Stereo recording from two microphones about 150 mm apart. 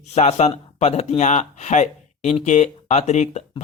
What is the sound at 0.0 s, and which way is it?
Speech, 50° left (ahead or behind).